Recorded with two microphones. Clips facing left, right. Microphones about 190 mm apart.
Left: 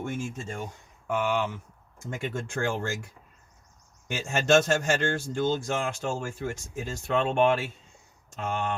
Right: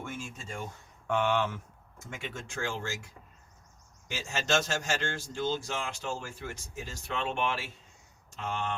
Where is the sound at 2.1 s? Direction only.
45° left (ahead or behind).